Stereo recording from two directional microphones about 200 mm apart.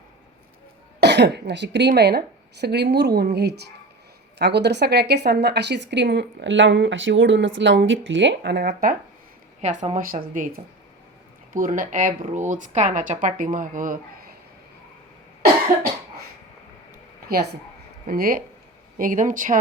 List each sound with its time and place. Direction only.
0.9 s speech: 60° right (ahead or behind)
9.6 s speech: 35° right (ahead or behind)
11.5 s speech: 40° right (ahead or behind)
17.2 s speech: 50° right (ahead or behind)